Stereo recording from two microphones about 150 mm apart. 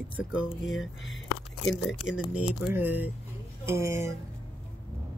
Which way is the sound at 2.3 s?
5° right (ahead or behind).